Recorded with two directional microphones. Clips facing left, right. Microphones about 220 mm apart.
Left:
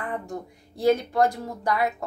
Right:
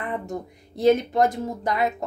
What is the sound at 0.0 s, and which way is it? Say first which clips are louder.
Speech: right 2 dB; 20° right (ahead or behind).